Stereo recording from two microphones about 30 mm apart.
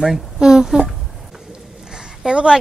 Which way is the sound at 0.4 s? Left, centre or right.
Right.